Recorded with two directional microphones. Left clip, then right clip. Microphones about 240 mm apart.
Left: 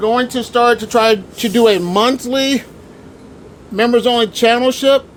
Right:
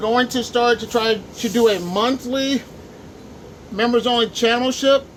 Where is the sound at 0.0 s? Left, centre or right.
Left.